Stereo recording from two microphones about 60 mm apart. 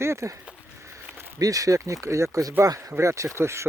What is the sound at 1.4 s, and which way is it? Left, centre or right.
Speech, right.